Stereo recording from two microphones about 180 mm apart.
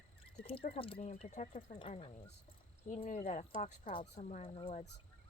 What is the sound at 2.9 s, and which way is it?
Speech, 40° left (ahead or behind).